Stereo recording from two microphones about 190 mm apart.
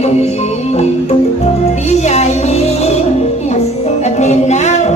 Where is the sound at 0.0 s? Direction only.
35° left (ahead or behind).